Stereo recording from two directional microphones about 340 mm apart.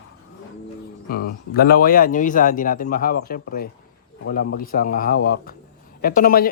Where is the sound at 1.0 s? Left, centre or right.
Left.